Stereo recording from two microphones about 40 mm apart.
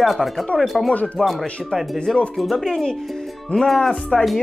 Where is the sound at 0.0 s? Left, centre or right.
Centre.